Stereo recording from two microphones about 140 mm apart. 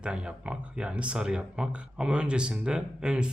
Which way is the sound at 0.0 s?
5° right (ahead or behind).